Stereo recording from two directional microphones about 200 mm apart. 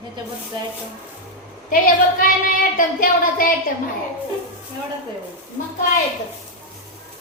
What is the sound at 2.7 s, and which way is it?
Speech, 45° left (ahead or behind).